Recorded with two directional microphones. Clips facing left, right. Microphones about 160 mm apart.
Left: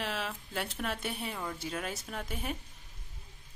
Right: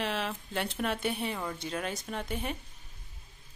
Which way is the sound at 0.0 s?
Centre (ahead or behind).